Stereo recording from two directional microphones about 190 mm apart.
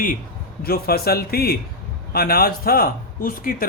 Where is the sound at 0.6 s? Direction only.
55° left (ahead or behind).